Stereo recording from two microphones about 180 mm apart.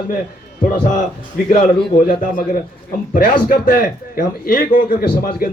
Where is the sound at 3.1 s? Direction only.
50° left (ahead or behind).